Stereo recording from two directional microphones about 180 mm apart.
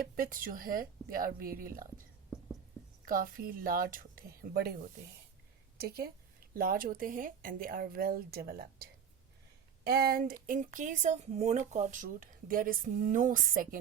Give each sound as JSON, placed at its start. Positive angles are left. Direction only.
{"t": 0.0, "sound": "a woman's voice", "side_deg": -55}
{"t": 3.1, "sound": "a woman's voice", "side_deg": -50}
{"t": 5.8, "sound": "a woman's voice", "side_deg": -55}